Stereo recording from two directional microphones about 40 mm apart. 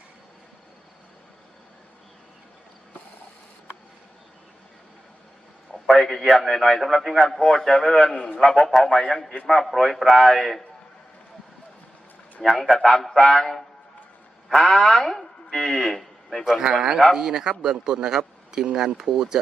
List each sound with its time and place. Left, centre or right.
6.0 s a man's voice: centre
8.1 s a man's voice: left
8.4 s speech: centre
9.6 s a man's voice: centre
12.4 s a man's voice: centre
16.4 s a man's voice: centre